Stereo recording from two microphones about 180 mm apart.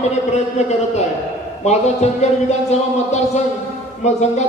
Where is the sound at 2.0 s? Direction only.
40° left (ahead or behind).